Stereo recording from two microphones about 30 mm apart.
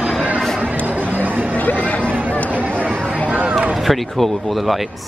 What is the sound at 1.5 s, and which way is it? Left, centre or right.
Chatter, left.